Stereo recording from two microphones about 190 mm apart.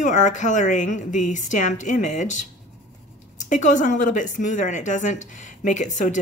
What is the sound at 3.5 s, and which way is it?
A woman's voice, 40° left (ahead or behind).